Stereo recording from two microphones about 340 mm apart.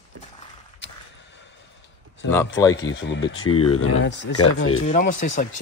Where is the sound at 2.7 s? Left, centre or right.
Left.